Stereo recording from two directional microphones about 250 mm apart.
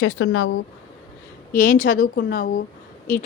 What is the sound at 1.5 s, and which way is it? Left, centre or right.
A woman's voice, left.